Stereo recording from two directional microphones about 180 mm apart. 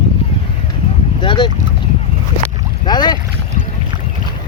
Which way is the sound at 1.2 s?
25° left (ahead or behind).